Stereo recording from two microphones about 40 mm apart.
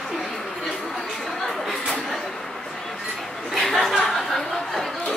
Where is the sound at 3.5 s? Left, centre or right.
Centre.